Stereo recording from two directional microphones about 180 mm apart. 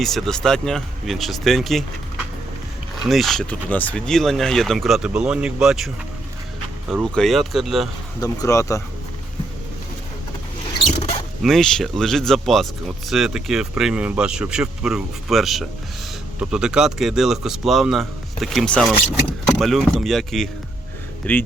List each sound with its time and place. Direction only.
0.0 s speech: centre (ahead or behind)
3.0 s speech: centre (ahead or behind)
7.0 s speech: 5° left (ahead or behind)
8.2 s speech: 20° left (ahead or behind)
11.4 s speech: centre (ahead or behind)